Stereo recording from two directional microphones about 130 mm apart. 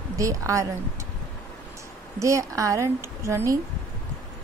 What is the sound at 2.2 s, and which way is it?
A woman's voice, 25° right (ahead or behind).